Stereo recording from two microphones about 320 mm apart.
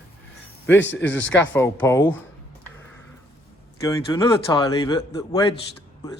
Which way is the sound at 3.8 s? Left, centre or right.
Centre.